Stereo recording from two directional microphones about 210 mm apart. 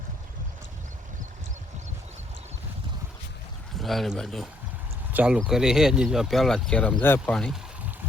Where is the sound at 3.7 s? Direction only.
Centre (ahead or behind).